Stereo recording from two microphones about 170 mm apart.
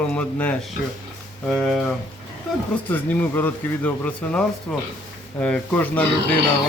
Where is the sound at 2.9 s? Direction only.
10° left (ahead or behind).